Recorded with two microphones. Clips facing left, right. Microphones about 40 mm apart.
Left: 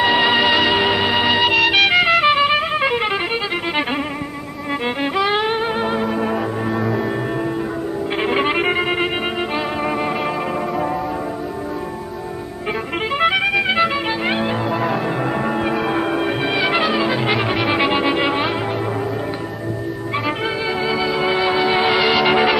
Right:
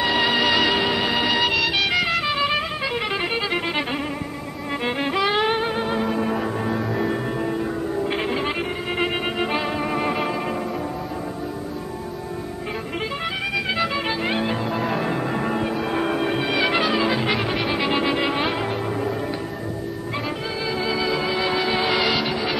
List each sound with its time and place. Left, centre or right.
0.0 s music: left
1.5 s music: left
4.8 s music: centre
5.8 s organ: centre
6.1 s music: centre
8.3 s music: left
9.8 s music: centre
13.2 s music: left
13.6 s music: left
14.0 s music: centre
14.8 s music: centre
20.8 s organ: centre
21.3 s music: left